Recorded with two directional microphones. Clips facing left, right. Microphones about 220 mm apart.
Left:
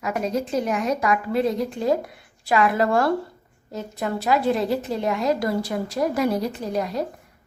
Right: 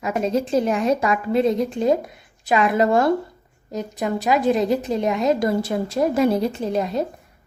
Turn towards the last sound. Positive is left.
turn(degrees=-25)  # may be behind; listen again after turning